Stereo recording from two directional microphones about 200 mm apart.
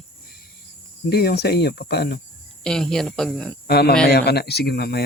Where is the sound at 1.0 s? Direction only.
55° left (ahead or behind).